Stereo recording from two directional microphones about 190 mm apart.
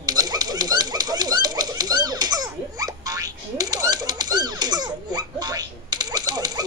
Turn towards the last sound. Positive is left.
turn(degrees=-20)  # may be behind; listen again after turning